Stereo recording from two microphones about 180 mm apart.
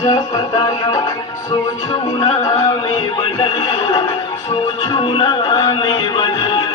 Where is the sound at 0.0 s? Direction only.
20° left (ahead or behind).